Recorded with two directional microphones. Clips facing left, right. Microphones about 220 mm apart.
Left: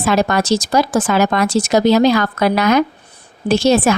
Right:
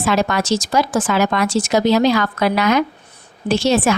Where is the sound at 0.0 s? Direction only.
40° left (ahead or behind).